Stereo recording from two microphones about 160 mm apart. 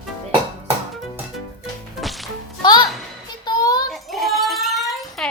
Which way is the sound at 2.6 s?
25° left (ahead or behind).